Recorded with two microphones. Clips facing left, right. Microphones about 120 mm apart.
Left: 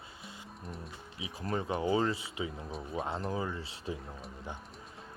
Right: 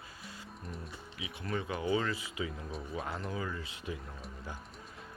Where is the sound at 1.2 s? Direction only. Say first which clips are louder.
Left 2 dB; 30° left (ahead or behind).